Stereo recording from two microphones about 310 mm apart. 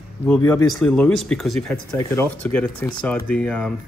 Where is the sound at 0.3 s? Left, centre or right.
Centre.